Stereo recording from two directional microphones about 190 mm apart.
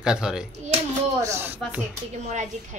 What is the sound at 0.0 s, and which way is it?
Speech, 5° right (ahead or behind).